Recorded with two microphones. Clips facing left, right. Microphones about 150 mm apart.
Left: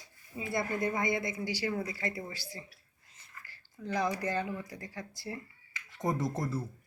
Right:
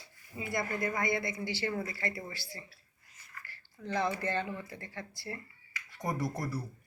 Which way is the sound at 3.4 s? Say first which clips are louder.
Left 2 dB; 15° left (ahead or behind).